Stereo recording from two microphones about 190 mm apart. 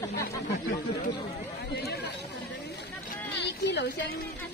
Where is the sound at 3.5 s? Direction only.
65° left (ahead or behind).